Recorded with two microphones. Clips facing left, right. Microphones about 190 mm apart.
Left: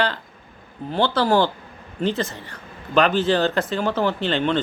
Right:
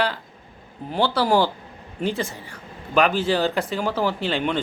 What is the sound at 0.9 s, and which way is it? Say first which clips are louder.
A man's voice: left 1 dB; 10° right (ahead or behind).